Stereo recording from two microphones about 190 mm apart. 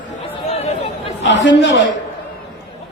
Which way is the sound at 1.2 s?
70° left (ahead or behind).